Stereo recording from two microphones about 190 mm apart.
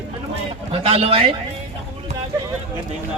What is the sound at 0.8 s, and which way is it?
Speech, 30° right (ahead or behind).